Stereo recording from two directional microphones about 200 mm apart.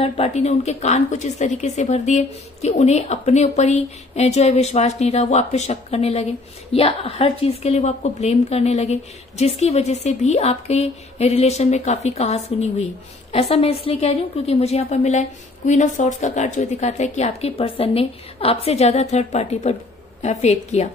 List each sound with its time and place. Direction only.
0.0 s a woman's voice: 30° left (ahead or behind)